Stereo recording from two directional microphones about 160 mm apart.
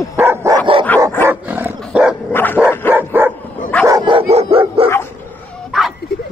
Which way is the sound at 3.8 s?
25° right (ahead or behind).